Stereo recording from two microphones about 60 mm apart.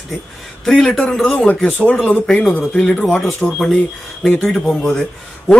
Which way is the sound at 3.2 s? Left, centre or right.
Centre.